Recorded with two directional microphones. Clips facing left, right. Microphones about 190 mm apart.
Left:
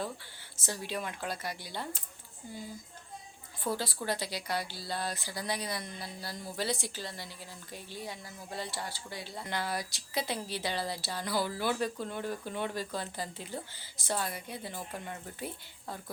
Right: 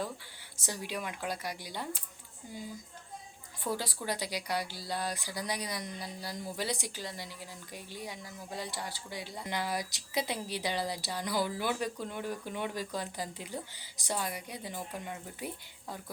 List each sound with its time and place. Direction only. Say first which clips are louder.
0.6 s speech: left 1 dB; 15° right (ahead or behind)
3.6 s speech: left 1 dB; 15° right (ahead or behind)